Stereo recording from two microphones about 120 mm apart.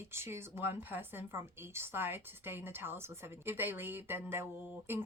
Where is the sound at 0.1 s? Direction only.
20° right (ahead or behind).